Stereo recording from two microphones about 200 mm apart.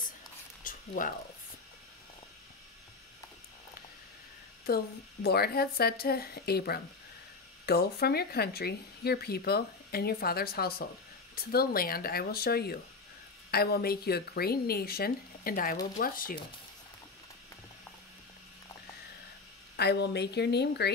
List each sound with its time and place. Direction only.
0.7 s a sound: 40° left (ahead or behind)
4.6 s speech: 50° left (ahead or behind)
19.8 s a woman's voice: 55° left (ahead or behind)